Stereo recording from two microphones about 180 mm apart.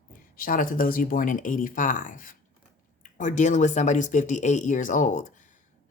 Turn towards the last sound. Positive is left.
turn(degrees=45)  # may be behind; listen again after turning